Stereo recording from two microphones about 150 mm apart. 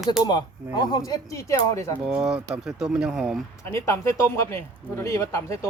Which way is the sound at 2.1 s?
5° right (ahead or behind).